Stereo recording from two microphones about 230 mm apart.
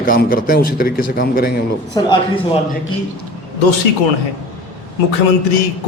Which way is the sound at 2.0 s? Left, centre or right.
Centre.